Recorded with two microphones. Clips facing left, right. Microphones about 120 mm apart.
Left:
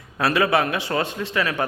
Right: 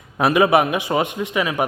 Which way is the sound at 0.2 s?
20° right (ahead or behind).